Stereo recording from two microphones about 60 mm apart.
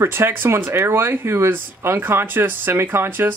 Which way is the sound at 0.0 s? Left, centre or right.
Right.